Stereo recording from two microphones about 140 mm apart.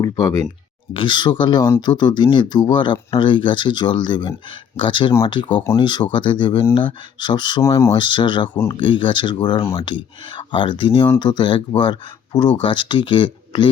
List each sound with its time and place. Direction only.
0.0 s speech: 25° left (ahead or behind)